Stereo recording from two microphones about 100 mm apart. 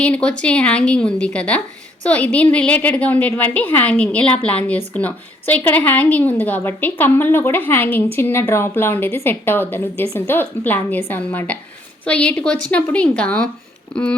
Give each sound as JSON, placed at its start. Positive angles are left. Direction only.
{"t": 0.0, "sound": "a woman's voice", "side_deg": 10}